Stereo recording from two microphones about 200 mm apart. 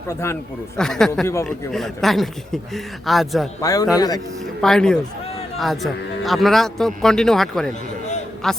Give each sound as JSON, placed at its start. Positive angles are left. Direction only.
{"t": 0.1, "sound": "a man's voice", "side_deg": 10}
{"t": 3.6, "sound": "a man's voice", "side_deg": 15}
{"t": 4.6, "sound": "speech", "side_deg": 5}